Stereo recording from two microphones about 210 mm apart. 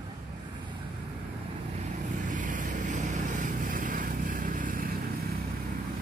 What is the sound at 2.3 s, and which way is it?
Vehicle, 40° right (ahead or behind).